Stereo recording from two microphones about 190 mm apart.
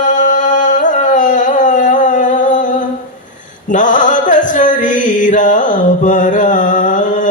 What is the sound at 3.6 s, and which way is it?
Mantra, 40° left (ahead or behind).